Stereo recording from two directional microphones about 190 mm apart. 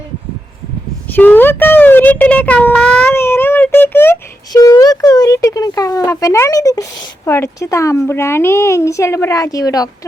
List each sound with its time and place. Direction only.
1.1 s speech: 10° left (ahead or behind)